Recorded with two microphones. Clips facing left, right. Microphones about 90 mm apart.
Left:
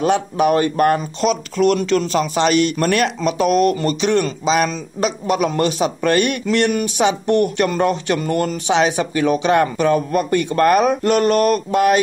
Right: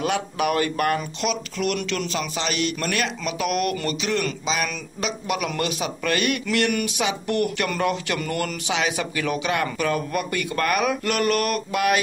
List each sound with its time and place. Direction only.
0.0 s speech: 30° left (ahead or behind)